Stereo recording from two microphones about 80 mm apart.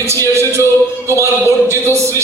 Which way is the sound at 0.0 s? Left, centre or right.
Right.